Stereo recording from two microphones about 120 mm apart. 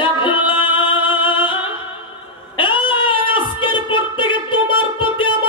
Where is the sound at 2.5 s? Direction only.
45° left (ahead or behind).